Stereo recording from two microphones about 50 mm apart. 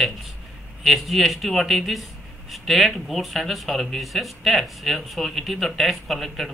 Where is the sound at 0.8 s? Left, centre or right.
Centre.